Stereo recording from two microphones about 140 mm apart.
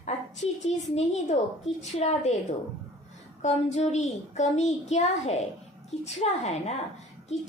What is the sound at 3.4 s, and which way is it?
A child's voice, 55° left (ahead or behind).